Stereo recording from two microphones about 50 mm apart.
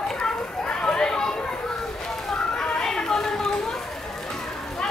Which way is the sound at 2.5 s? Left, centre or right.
Centre.